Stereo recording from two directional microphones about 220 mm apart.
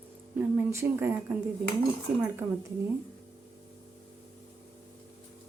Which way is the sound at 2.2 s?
10° right (ahead or behind).